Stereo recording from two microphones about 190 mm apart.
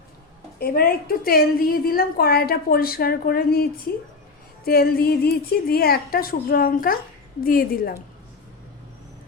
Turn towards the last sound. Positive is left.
turn(degrees=50)  # may be behind; listen again after turning